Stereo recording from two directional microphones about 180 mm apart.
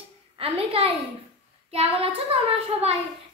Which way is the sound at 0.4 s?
30° right (ahead or behind).